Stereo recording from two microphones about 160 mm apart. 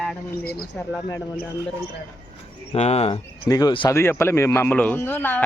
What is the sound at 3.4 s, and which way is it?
Speech, 20° left (ahead or behind).